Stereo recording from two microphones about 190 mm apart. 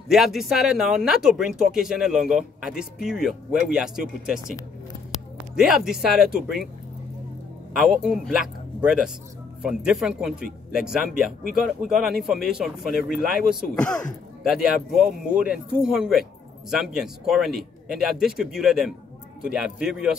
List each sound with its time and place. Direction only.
0.1 s speech: centre (ahead or behind)
5.6 s speech: 5° right (ahead or behind)
7.7 s speech: centre (ahead or behind)